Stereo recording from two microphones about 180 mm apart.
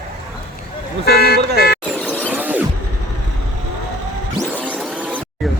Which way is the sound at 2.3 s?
10° right (ahead or behind).